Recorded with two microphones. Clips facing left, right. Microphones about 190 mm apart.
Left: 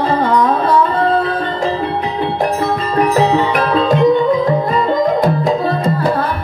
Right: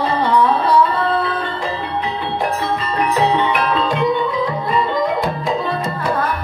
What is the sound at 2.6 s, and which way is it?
Music, 45° left (ahead or behind).